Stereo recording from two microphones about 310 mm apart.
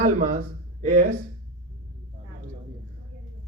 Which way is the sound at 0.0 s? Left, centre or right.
Right.